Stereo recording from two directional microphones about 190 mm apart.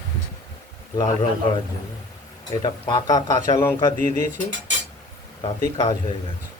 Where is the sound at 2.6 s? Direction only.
20° left (ahead or behind).